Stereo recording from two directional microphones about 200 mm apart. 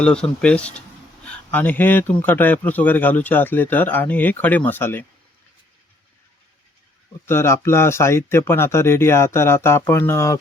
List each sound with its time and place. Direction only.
0.0 s speech: 5° left (ahead or behind)
7.3 s speech: 10° left (ahead or behind)